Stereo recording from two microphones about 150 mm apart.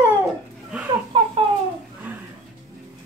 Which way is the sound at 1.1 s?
35° right (ahead or behind).